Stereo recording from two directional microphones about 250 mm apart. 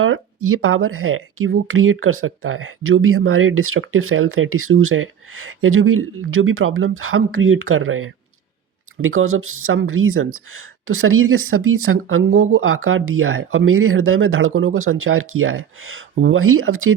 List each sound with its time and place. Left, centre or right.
0.0 s speech: right